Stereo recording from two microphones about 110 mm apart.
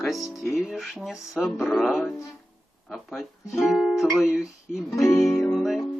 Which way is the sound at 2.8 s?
Centre (ahead or behind).